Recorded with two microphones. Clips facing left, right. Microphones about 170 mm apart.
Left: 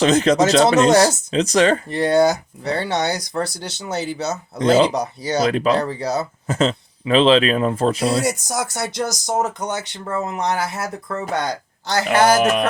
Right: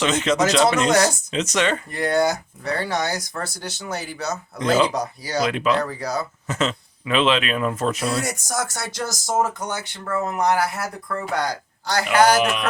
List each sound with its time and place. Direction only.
0.0 s speech: 35° left (ahead or behind)
5.4 s speech: 40° left (ahead or behind)
5.8 s speech: 25° left (ahead or behind)
12.0 s speech: 45° left (ahead or behind)